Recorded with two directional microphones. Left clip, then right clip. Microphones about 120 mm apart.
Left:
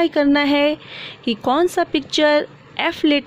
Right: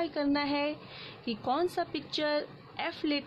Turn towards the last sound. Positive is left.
turn(degrees=55)  # may be behind; listen again after turning